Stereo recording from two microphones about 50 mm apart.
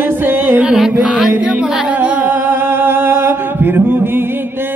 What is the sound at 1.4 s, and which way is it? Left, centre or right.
Speech, right.